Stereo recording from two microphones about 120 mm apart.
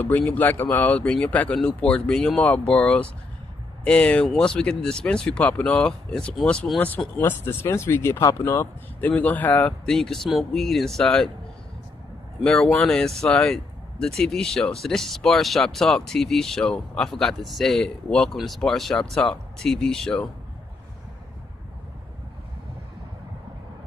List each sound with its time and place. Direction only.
0.0 s speech: 15° left (ahead or behind)
8.5 s speech: 15° left (ahead or behind)
12.4 s speech: centre (ahead or behind)